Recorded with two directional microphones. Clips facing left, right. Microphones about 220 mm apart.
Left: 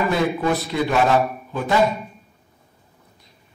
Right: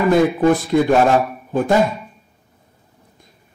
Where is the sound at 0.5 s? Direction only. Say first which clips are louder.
Right 7 dB; 50° right (ahead or behind).